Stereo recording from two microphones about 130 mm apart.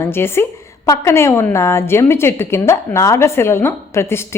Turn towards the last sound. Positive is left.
turn(degrees=20)  # may be behind; listen again after turning